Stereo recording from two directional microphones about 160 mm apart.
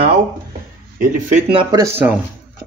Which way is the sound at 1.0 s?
50° right (ahead or behind).